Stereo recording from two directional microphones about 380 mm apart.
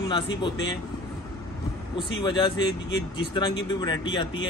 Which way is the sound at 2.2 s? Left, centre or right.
Centre.